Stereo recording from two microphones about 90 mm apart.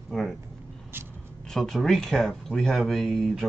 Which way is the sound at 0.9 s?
25° right (ahead or behind).